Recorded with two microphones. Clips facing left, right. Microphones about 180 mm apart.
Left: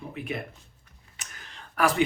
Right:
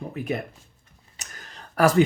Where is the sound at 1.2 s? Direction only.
40° right (ahead or behind).